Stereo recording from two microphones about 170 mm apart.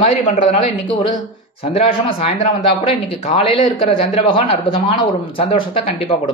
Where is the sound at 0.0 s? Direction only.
50° left (ahead or behind).